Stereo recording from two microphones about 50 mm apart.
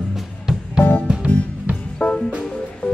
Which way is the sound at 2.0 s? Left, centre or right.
Left.